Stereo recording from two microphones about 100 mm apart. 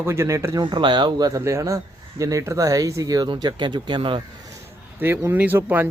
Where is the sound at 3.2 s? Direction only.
45° right (ahead or behind).